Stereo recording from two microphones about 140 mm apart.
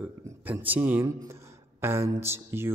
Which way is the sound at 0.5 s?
10° right (ahead or behind).